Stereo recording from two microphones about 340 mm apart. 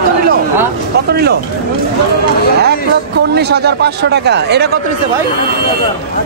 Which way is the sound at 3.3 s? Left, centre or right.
Right.